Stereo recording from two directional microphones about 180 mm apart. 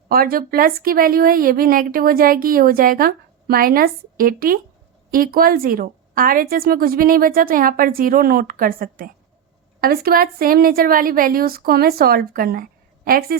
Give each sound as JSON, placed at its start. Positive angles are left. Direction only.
{"t": 0.1, "sound": "a woman's voice", "side_deg": -55}